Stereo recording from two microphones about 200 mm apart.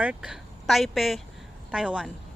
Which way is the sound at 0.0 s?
5° right (ahead or behind).